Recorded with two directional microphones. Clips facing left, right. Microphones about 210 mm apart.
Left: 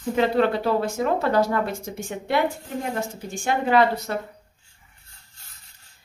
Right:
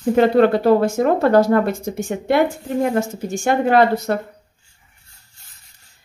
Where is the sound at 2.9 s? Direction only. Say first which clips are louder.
Right 8 dB; 45° right (ahead or behind).